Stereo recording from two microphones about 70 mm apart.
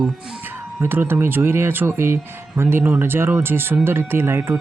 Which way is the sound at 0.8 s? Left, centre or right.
Right.